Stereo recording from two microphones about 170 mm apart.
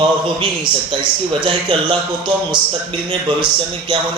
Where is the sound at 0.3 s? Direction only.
30° right (ahead or behind).